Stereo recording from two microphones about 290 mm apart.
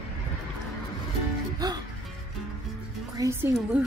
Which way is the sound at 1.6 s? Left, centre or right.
Centre.